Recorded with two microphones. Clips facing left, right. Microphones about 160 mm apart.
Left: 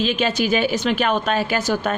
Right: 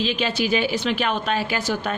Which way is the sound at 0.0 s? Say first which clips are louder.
Left 3 dB; 50° left (ahead or behind).